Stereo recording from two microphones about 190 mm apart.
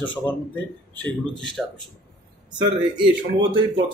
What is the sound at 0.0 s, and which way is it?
Speech, 25° left (ahead or behind).